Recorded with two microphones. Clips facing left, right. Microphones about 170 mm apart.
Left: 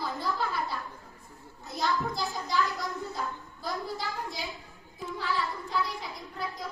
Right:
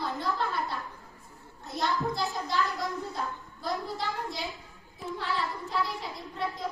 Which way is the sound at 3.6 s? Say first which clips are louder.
Right 2 dB; centre (ahead or behind).